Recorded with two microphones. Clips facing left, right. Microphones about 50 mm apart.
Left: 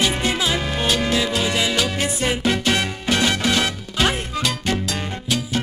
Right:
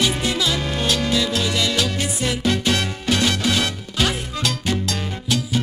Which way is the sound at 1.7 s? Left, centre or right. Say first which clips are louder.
Left 1 dB; centre.